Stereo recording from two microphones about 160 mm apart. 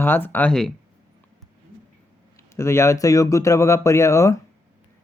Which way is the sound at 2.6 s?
20° left (ahead or behind).